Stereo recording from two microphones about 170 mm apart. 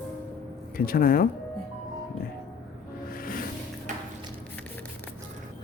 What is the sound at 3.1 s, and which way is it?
Music, 55° left (ahead or behind).